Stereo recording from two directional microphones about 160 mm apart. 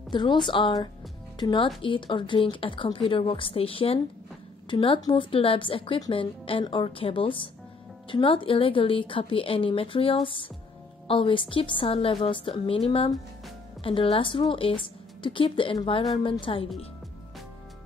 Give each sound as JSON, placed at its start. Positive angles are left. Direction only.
{"t": 0.1, "sound": "a woman's voice", "side_deg": 30}